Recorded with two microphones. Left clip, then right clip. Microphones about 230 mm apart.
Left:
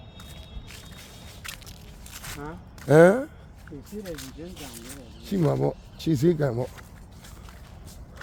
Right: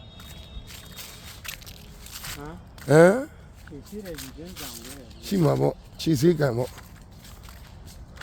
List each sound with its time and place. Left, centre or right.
1.5 s a sound: centre
3.7 s speech: centre
5.4 s speech: right